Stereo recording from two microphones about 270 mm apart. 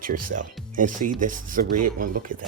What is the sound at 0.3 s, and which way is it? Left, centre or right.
Speech, right.